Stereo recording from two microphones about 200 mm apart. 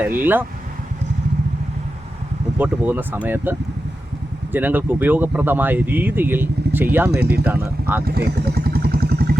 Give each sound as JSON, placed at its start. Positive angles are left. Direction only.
{"t": 0.0, "sound": "speech", "side_deg": -10}
{"t": 2.6, "sound": "speech", "side_deg": -10}
{"t": 4.5, "sound": "speech", "side_deg": -10}
{"t": 8.0, "sound": "vehicle", "side_deg": -50}